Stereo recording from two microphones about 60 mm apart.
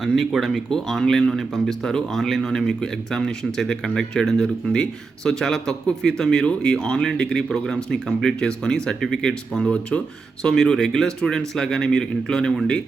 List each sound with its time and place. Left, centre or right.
0.0 s speech: centre
9.6 s speech: left
10.4 s speech: centre